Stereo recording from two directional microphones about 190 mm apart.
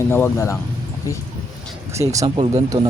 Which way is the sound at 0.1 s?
15° left (ahead or behind).